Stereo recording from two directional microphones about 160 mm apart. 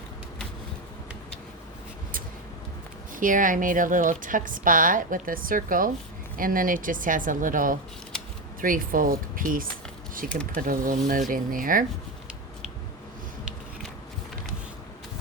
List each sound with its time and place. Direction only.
3.2 s a woman's voice: 55° right (ahead or behind)